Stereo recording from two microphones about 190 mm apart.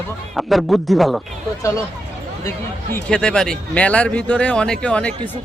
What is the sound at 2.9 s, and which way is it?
A man's voice, 5° left (ahead or behind).